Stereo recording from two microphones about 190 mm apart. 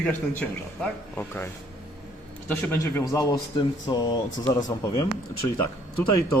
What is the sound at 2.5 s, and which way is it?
A man's voice, 10° left (ahead or behind).